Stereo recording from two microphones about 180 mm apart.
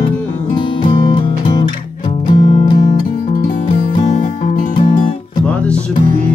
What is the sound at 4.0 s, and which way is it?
Music, 45° left (ahead or behind).